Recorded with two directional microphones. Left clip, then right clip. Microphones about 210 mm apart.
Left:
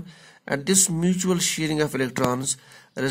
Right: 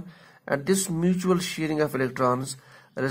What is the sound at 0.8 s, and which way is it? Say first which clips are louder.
Speech: even; 35° left (ahead or behind).